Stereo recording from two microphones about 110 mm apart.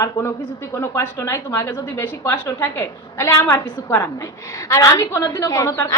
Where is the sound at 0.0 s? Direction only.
25° left (ahead or behind).